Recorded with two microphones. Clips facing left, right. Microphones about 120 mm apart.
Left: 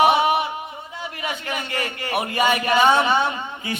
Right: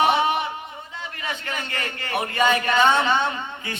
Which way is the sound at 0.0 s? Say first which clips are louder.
Left 3 dB; 15° left (ahead or behind).